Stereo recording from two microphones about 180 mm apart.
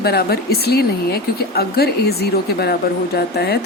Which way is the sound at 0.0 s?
60° left (ahead or behind).